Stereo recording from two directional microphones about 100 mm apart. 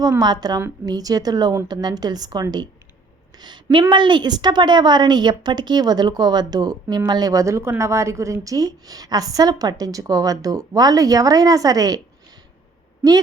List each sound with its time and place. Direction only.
0.2 s a woman's voice: 45° right (ahead or behind)